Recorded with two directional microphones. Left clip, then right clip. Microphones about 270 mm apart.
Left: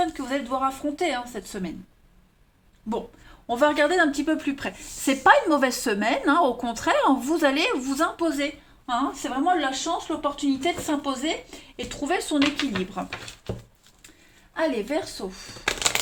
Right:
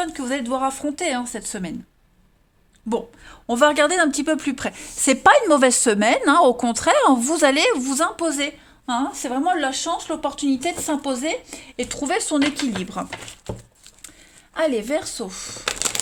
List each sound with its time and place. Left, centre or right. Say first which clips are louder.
0.0 s a woman's voice: right 1 dB; right
2.9 s a woman's voice: right 5 dB; right
14.5 s a woman's voice: right 4 dB; right